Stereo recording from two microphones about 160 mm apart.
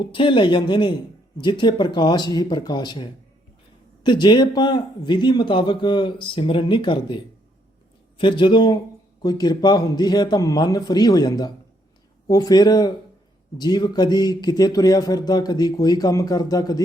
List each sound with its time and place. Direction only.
0.0 s speech: 30° left (ahead or behind)